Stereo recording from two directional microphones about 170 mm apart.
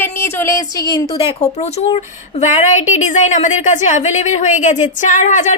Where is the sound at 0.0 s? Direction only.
15° left (ahead or behind).